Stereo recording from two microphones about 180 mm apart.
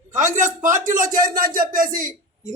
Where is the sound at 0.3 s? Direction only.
45° right (ahead or behind).